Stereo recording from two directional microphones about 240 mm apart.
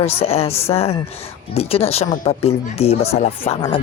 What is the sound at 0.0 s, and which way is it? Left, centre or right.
Speech, left.